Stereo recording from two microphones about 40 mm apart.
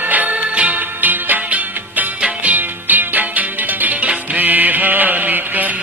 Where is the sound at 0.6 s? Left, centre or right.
Right.